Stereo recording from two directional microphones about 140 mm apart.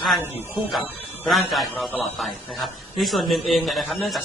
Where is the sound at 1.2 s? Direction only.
Centre (ahead or behind).